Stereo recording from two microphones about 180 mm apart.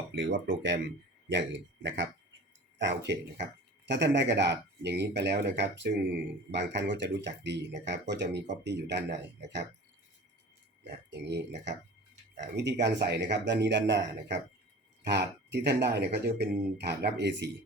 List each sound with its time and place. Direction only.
0.1 s speech: 90° right
2.7 s speech: 80° right
10.8 s speech: 70° right (ahead or behind)
12.8 s speech: 70° right (ahead or behind)